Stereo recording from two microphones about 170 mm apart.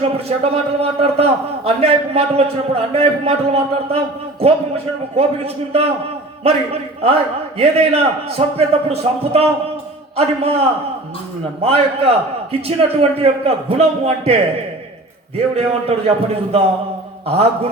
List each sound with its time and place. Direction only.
0.0 s a man's voice: 35° right (ahead or behind)
7.6 s a man's voice: 35° right (ahead or behind)
15.5 s a man's voice: 35° right (ahead or behind)